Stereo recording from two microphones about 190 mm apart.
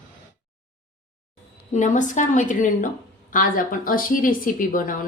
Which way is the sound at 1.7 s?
40° left (ahead or behind).